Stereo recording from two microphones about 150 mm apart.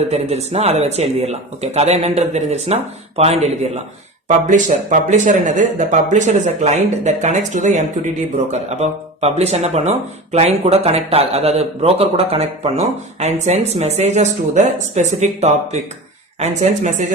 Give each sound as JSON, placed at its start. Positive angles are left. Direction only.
{"t": 0.1, "sound": "speech", "side_deg": -45}